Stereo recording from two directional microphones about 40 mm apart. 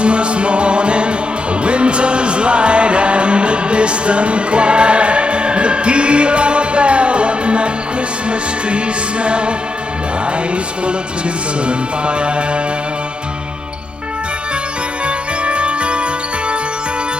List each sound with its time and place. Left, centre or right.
0.0 s music: right
11.6 s music: right
15.0 s music: right